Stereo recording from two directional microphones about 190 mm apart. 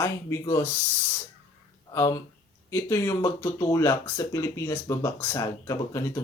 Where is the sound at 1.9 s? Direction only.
15° left (ahead or behind).